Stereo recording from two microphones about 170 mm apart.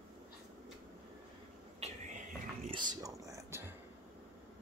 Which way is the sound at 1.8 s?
40° right (ahead or behind).